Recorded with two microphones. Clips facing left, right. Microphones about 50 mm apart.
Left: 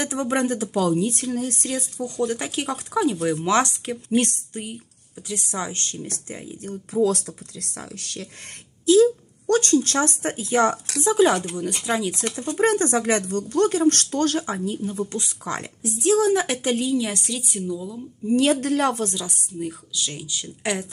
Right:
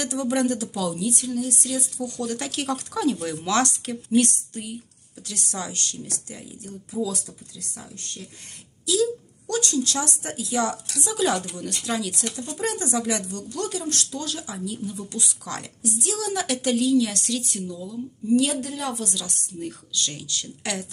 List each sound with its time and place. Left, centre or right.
0.0 s speech: left
2.0 s a woman's voice: left
3.4 s a woman's voice: left
8.8 s a woman's voice: left; by 17.9 s centre
18.3 s speech: left
18.6 s speech: left
19.1 s speech: centre